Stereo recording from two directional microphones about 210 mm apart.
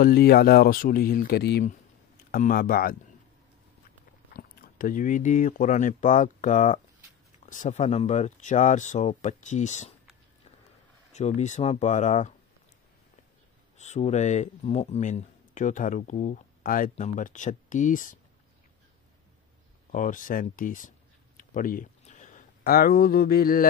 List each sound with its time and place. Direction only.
0.0 s speech: 45° left (ahead or behind)
4.3 s speech: 45° left (ahead or behind)
11.1 s speech: 35° left (ahead or behind)
13.7 s speech: 35° left (ahead or behind)
19.9 s speech: 40° left (ahead or behind)